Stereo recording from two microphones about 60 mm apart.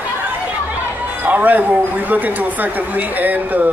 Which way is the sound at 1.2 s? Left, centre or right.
Right.